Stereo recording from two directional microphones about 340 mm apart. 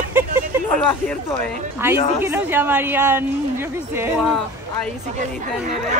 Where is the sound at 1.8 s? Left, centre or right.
Centre.